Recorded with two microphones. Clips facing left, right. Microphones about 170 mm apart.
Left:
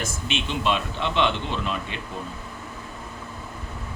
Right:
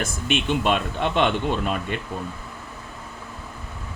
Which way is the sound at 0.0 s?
55° right (ahead or behind).